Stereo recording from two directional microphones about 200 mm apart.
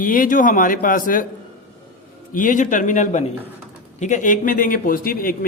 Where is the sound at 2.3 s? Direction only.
40° left (ahead or behind).